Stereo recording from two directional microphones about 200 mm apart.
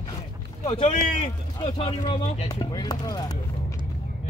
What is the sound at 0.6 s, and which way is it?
Speech, 30° left (ahead or behind).